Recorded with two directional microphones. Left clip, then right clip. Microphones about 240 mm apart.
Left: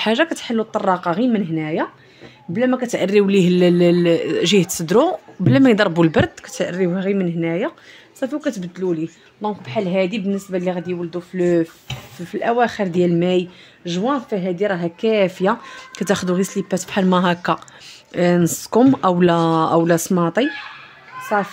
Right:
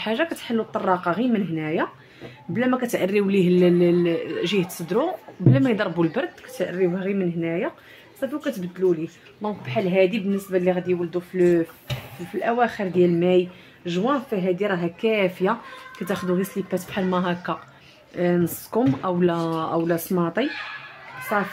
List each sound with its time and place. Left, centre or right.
0.0 s speech: left